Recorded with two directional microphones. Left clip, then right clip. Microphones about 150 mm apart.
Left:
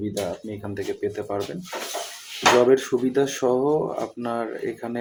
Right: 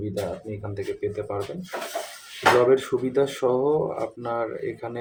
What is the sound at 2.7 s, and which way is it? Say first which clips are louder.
Speech: left 1 dB; 10° left (ahead or behind).